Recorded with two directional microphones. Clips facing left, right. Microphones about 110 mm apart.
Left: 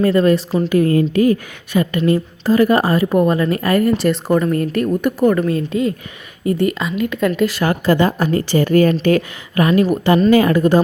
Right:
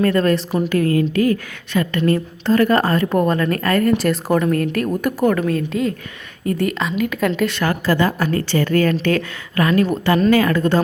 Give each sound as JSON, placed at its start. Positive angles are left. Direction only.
{"t": 0.0, "sound": "a woman's voice", "side_deg": 5}
{"t": 0.9, "sound": "a woman's voice", "side_deg": 25}
{"t": 7.6, "sound": "a woman's voice", "side_deg": 20}